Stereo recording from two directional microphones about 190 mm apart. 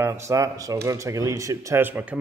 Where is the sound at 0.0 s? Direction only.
15° right (ahead or behind).